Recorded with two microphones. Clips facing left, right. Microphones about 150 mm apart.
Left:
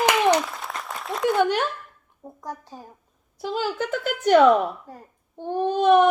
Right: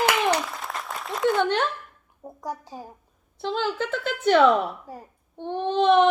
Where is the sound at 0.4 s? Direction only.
Centre (ahead or behind).